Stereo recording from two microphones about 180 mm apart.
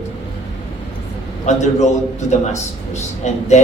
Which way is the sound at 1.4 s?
40° left (ahead or behind).